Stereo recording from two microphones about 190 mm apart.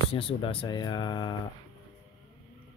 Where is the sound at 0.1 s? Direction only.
30° left (ahead or behind).